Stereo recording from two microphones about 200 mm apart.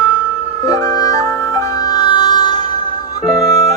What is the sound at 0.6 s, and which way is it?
Music, 15° left (ahead or behind).